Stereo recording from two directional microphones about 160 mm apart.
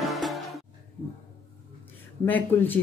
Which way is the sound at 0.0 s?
Centre (ahead or behind).